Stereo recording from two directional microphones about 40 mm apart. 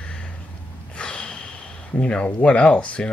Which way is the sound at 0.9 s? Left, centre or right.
Left.